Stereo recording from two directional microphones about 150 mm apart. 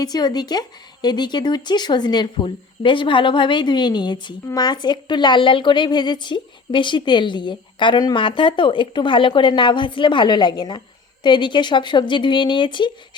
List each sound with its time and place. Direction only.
0.0 s speech: 25° left (ahead or behind)